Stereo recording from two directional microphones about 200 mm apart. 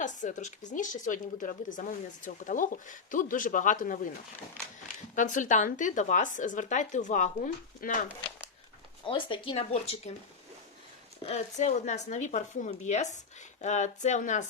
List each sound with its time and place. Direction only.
0.0 s a woman's voice: 40° left (ahead or behind)
5.1 s a woman's voice: 40° left (ahead or behind)
9.0 s speech: 25° left (ahead or behind)
11.2 s a woman's voice: 30° left (ahead or behind)